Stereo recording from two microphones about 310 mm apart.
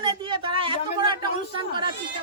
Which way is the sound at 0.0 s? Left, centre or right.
Centre.